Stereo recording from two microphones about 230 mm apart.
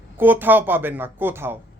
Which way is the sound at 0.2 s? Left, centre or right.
Centre.